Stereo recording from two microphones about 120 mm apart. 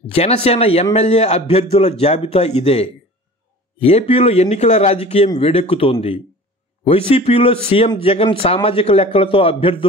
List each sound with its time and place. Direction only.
0.1 s a man's voice: 60° left (ahead or behind)
5.4 s a man's voice: 55° left (ahead or behind)